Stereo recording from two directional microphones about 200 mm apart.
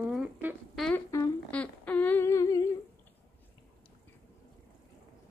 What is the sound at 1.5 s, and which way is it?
Humming, 5° left (ahead or behind).